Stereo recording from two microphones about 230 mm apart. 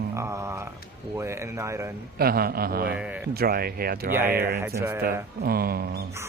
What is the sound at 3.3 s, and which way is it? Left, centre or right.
Speech, right.